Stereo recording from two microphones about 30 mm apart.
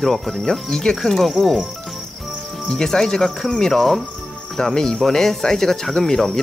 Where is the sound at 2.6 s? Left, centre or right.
Centre.